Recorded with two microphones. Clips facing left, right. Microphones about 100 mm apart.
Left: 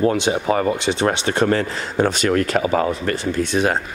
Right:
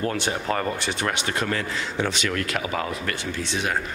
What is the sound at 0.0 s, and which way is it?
Speech, 20° left (ahead or behind).